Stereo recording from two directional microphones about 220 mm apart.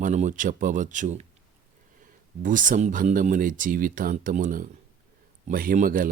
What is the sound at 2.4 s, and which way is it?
Speech, 35° right (ahead or behind).